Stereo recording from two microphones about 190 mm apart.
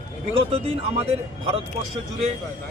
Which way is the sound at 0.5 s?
30° right (ahead or behind).